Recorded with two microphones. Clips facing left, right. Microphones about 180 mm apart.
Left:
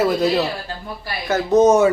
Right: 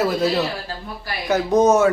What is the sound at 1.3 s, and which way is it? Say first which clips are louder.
Speech: left 2 dB; 10° right (ahead or behind).